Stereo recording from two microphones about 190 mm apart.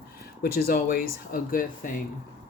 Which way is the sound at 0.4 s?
50° left (ahead or behind).